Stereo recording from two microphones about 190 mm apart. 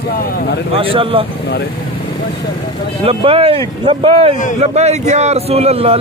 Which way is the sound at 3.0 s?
30° right (ahead or behind).